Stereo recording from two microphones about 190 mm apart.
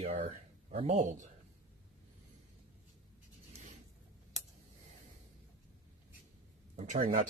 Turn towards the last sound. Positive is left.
turn(degrees=-45)  # may be behind; listen again after turning